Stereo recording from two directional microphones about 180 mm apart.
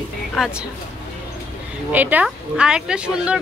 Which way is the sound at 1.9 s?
10° right (ahead or behind).